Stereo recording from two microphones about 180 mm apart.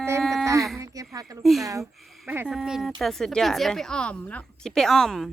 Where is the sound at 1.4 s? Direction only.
Centre (ahead or behind).